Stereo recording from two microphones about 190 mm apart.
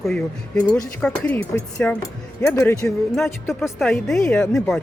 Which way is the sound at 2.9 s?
Centre (ahead or behind).